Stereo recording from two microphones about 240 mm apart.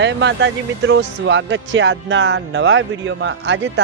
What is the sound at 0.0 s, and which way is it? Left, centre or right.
Speech, right.